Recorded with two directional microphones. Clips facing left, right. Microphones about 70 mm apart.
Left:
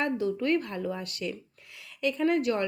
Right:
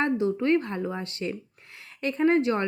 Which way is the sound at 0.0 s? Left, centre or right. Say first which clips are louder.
Right 3 dB; right.